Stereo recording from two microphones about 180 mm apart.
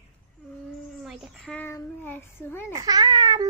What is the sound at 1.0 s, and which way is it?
Child singing, centre (ahead or behind).